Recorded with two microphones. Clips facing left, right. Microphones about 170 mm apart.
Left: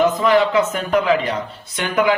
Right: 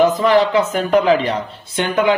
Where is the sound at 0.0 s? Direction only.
35° right (ahead or behind).